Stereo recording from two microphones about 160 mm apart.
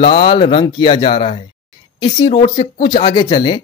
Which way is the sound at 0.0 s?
35° left (ahead or behind).